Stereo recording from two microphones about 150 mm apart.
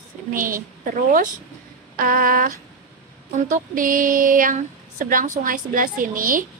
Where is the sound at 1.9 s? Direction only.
65° right (ahead or behind).